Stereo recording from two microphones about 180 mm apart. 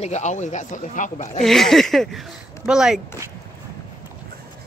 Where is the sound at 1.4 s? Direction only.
Centre (ahead or behind).